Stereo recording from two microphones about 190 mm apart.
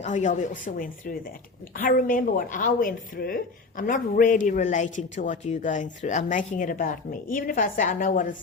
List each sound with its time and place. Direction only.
0.0 s a woman's voice: 40° left (ahead or behind)